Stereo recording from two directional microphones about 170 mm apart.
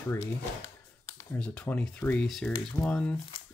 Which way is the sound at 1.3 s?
10° left (ahead or behind).